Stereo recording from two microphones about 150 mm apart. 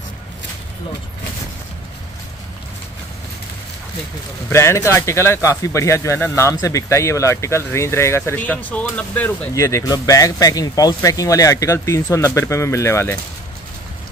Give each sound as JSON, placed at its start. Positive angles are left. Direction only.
{"t": 4.5, "sound": "speech", "side_deg": 20}
{"t": 9.5, "sound": "speech", "side_deg": 20}